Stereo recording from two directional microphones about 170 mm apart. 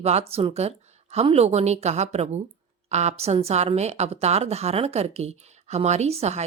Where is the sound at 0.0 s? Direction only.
40° right (ahead or behind).